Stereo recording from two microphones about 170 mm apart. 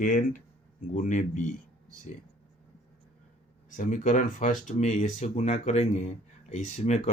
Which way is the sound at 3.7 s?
50° left (ahead or behind).